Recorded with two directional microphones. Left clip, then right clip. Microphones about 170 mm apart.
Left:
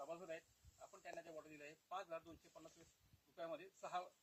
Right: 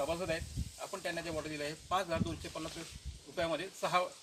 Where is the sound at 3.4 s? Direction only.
10° right (ahead or behind).